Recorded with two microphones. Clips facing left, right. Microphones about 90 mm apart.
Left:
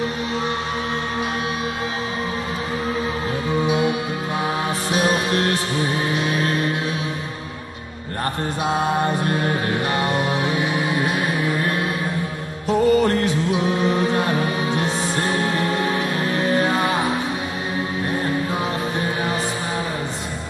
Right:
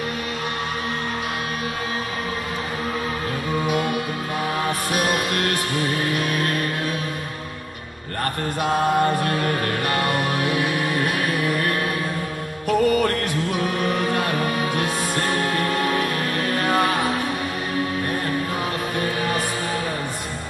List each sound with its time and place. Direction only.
4.6 s music: 30° left (ahead or behind)
9.3 s music: 20° left (ahead or behind)